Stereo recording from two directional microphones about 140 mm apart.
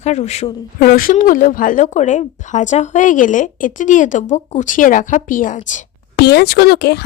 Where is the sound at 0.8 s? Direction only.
90° left.